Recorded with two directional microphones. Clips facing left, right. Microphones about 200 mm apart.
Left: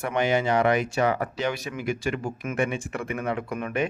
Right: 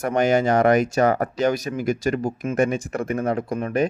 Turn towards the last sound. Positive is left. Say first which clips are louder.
# right 5 dB
turn(degrees=-35)  # may be behind; listen again after turning